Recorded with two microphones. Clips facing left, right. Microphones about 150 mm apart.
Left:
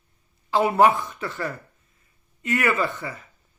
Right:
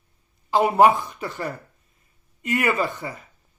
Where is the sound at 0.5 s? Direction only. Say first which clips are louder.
Right 2 dB; 15° right (ahead or behind).